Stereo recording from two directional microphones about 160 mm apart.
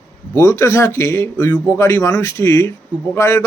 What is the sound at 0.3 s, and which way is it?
A man's voice, 20° left (ahead or behind).